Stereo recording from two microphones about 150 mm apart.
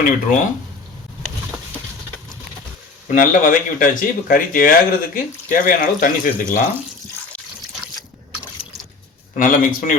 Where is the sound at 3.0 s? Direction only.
60° left (ahead or behind).